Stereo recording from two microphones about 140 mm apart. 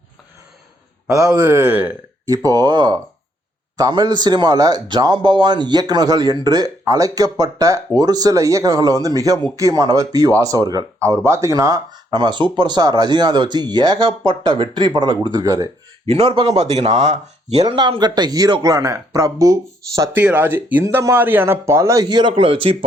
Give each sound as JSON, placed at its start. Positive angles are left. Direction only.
{"t": 1.0, "sound": "speech", "side_deg": -25}
{"t": 1.5, "sound": "speech", "side_deg": -15}
{"t": 2.2, "sound": "speech", "side_deg": -25}
{"t": 16.0, "sound": "a man's voice", "side_deg": -45}
{"t": 17.6, "sound": "speech", "side_deg": -35}
{"t": 20.1, "sound": "speech", "side_deg": -15}
{"t": 22.0, "sound": "a man's voice", "side_deg": -35}